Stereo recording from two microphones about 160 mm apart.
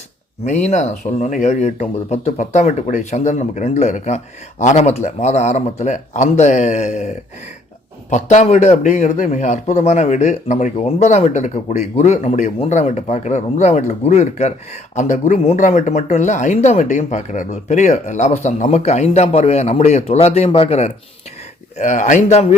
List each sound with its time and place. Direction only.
0.4 s a man's voice: 45° left (ahead or behind)